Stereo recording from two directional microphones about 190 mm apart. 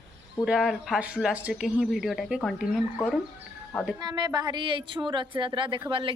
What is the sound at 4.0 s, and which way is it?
A woman's voice, 20° right (ahead or behind).